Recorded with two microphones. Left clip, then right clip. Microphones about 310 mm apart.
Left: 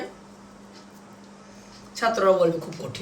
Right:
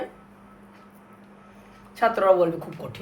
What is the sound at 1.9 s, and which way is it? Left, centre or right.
Speech, centre.